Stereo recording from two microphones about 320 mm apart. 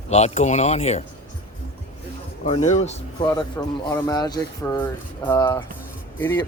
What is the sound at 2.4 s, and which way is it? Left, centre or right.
Speech, left.